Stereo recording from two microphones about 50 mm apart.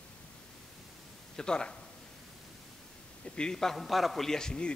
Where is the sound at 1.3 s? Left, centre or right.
Centre.